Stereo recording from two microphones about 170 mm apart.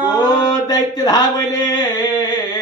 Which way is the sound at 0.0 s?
25° left (ahead or behind).